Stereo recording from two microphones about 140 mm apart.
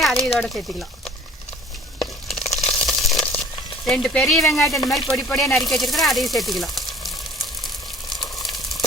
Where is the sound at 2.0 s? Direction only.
Centre (ahead or behind).